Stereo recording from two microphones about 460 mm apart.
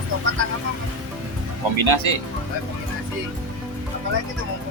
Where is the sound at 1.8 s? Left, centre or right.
Right.